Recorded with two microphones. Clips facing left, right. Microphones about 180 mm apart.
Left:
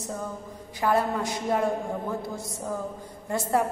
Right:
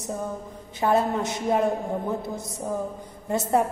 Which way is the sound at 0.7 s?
25° right (ahead or behind).